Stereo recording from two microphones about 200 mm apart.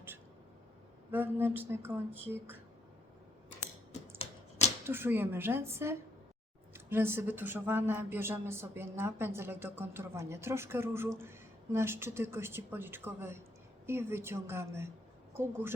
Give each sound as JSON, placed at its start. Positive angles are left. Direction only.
{"t": 1.1, "sound": "speech", "side_deg": -10}
{"t": 4.2, "sound": "typewriter", "side_deg": 35}
{"t": 4.9, "sound": "speech", "side_deg": -10}